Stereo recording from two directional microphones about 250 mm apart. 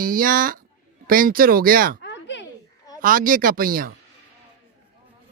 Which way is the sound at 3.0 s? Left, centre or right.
Right.